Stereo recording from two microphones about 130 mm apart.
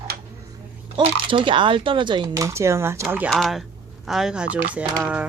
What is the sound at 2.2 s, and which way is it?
Speech, 25° right (ahead or behind).